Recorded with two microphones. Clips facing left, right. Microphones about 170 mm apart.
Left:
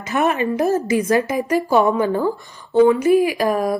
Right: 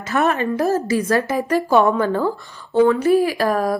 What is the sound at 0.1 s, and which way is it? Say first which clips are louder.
Speech: even; 15° left (ahead or behind).